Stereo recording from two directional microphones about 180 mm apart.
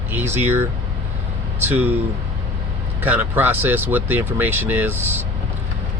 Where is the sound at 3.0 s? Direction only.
10° right (ahead or behind).